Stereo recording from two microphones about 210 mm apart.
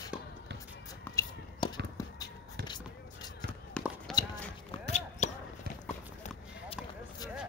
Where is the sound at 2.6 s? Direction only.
20° left (ahead or behind).